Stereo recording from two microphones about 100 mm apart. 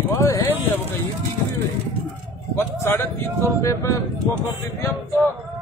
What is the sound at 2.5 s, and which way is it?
Speech, 25° left (ahead or behind).